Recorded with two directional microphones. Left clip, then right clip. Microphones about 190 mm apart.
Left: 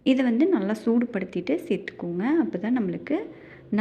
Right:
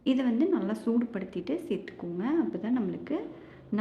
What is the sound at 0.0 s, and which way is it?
A woman's voice, 20° left (ahead or behind).